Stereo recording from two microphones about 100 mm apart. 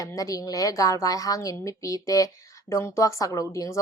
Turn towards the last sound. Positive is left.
turn(degrees=35)  # may be behind; listen again after turning